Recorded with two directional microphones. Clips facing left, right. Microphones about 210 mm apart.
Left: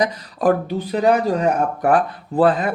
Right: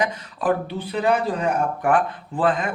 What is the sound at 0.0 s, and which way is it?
Speech, 40° left (ahead or behind).